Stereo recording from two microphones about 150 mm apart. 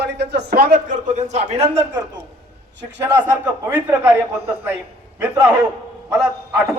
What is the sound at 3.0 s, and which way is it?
A man's voice, 15° right (ahead or behind).